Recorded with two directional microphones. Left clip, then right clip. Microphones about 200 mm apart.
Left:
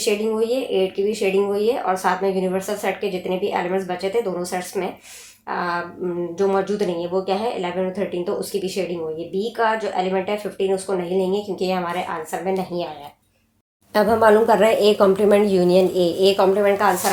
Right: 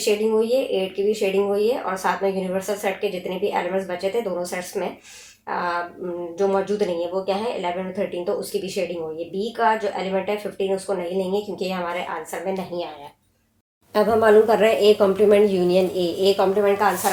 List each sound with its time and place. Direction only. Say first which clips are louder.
0.0 s speech: right 1 dB; 35° left (ahead or behind)
6.3 s speech: even; 35° left (ahead or behind)
13.9 s speech: left 1 dB; 45° left (ahead or behind)